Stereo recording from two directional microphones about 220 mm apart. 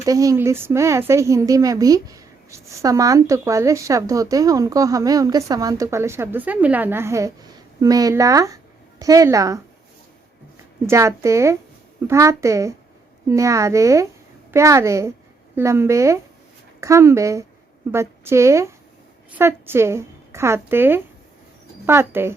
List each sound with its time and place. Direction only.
0.0 s speech: 15° right (ahead or behind)
10.8 s a woman's voice: 15° right (ahead or behind)